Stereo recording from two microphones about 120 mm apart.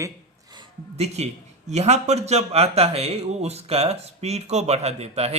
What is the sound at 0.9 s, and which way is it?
A man's voice, 65° right (ahead or behind).